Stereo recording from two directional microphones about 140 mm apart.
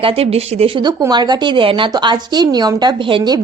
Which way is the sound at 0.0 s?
45° right (ahead or behind).